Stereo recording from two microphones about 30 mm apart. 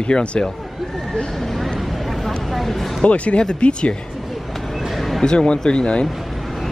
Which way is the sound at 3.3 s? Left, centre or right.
Left.